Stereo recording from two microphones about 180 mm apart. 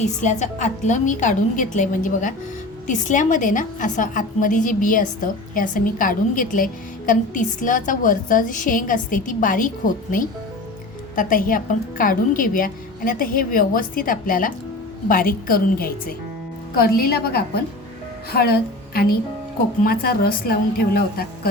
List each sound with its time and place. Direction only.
0.0 s a woman's voice: 40° left (ahead or behind)